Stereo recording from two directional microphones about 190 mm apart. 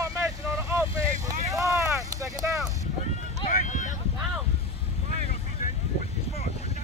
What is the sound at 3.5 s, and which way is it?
Boat, 45° left (ahead or behind).